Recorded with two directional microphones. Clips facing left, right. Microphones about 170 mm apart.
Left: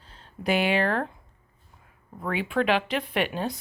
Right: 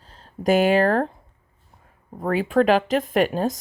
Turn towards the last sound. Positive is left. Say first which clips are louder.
# right 7 dB
turn(degrees=-40)  # may be behind; listen again after turning